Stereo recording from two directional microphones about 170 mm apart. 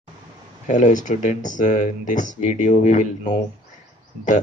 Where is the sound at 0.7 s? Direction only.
50° left (ahead or behind).